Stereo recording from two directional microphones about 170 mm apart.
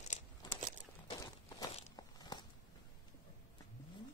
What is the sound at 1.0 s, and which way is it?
Walk, 25° left (ahead or behind).